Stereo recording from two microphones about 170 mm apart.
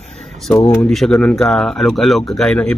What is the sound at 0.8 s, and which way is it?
Speech, 5° left (ahead or behind).